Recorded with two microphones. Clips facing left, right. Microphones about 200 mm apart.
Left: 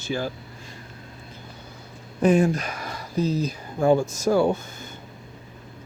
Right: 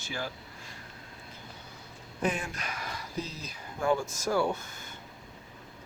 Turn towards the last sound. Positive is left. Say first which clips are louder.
# left 8 dB
turn(degrees=25)  # may be behind; listen again after turning